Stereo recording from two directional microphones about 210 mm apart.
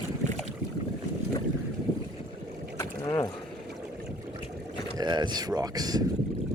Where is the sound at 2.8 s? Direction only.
15° left (ahead or behind).